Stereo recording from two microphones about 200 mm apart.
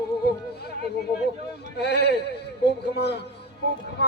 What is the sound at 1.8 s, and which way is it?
A man's voice, 55° left (ahead or behind).